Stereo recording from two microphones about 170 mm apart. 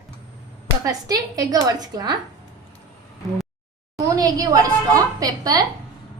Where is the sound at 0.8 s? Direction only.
20° right (ahead or behind).